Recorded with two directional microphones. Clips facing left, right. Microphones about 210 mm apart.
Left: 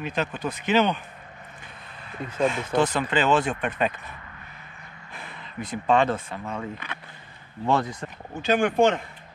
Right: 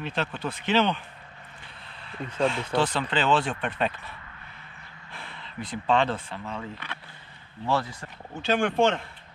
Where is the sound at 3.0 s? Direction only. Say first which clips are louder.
Left 2 dB; 10° left (ahead or behind).